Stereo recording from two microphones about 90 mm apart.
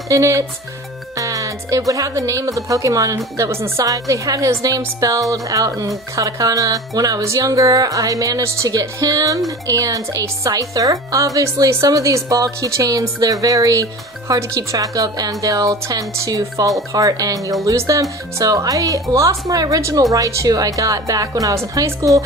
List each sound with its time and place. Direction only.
0.1 s speech: 35° right (ahead or behind)
1.1 s music: 40° right (ahead or behind)
1.9 s speech: 40° right (ahead or behind)